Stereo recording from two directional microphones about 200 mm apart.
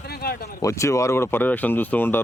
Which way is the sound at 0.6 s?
15° left (ahead or behind).